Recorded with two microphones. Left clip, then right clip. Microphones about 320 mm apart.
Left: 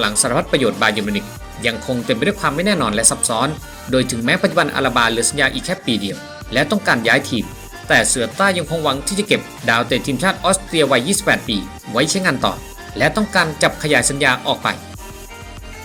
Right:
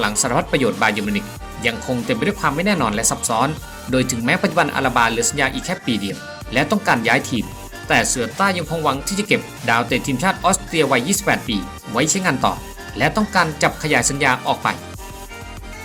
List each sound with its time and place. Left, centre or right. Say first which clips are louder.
0.0 s speech: left 1 dB; centre